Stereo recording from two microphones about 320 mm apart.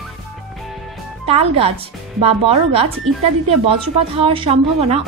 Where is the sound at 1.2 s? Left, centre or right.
Centre.